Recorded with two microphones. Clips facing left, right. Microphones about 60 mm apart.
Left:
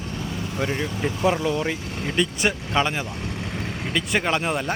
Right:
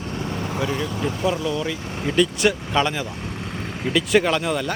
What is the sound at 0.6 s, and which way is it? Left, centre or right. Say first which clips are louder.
Speech: even; left.